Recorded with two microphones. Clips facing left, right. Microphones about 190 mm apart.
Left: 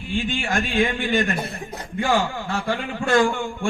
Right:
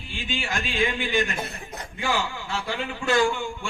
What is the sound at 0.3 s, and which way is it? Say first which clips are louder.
A man's voice: left 5 dB; 50° left (ahead or behind).